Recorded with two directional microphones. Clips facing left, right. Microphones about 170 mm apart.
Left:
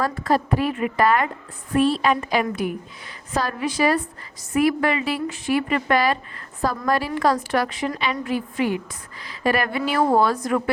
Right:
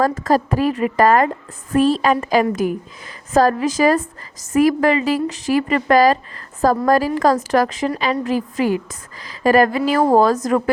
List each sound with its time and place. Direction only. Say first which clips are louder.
0.0 s a woman's voice: right 5 dB; 40° right (ahead or behind)